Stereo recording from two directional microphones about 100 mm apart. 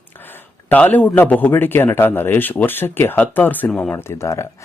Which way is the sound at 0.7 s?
20° left (ahead or behind).